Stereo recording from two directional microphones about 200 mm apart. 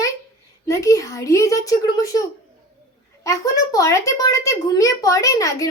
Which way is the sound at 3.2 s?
15° left (ahead or behind).